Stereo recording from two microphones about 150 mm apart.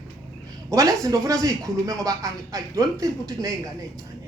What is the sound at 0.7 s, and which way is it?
Speech, 20° right (ahead or behind).